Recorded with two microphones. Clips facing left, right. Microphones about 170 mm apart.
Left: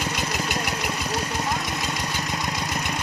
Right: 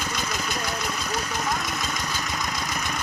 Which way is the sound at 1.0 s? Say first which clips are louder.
Left 1 dB; 30° left (ahead or behind).